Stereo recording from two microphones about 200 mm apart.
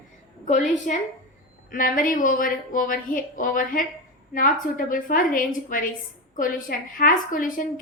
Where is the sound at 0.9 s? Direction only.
40° left (ahead or behind).